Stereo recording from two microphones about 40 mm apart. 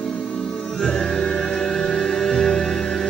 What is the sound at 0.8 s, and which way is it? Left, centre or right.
Music, centre.